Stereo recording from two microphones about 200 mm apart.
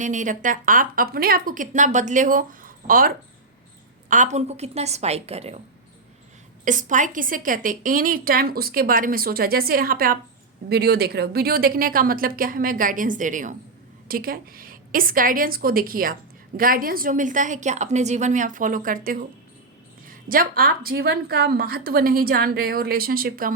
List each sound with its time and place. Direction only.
0.0 s a woman's voice: 40° right (ahead or behind)
4.1 s a woman's voice: 35° right (ahead or behind)
6.7 s a woman's voice: 40° right (ahead or behind)